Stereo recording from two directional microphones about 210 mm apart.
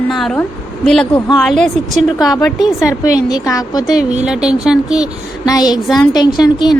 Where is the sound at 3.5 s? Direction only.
15° left (ahead or behind).